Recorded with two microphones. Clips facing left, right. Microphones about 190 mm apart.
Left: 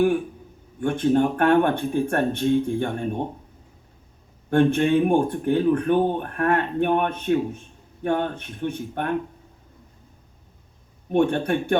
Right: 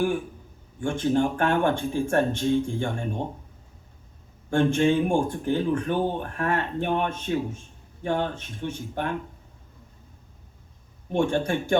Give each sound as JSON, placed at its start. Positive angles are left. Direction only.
{"t": 0.8, "sound": "speech", "side_deg": 60}
{"t": 4.4, "sound": "speech", "side_deg": 60}
{"t": 11.1, "sound": "speech", "side_deg": 60}